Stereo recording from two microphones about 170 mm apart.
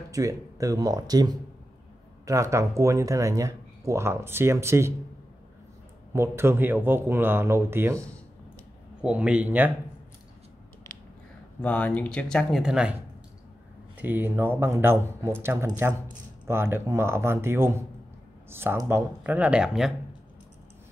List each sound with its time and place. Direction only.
0.1 s speech: 20° right (ahead or behind)
6.1 s speech: 15° right (ahead or behind)
9.0 s speech: 5° right (ahead or behind)
11.6 s speech: 10° left (ahead or behind)
13.9 s speech: 10° right (ahead or behind)